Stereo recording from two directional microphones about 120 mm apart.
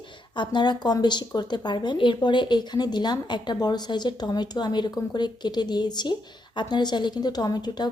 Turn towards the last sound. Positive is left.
turn(degrees=35)  # may be behind; listen again after turning